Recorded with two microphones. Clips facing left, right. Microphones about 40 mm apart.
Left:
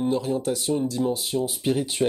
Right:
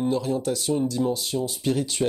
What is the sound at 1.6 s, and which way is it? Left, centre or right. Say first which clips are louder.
Speech: right 1 dB; centre.